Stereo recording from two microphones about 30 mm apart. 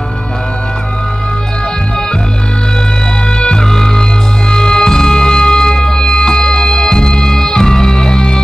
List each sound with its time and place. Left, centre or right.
3.3 s music: left
3.6 s music: centre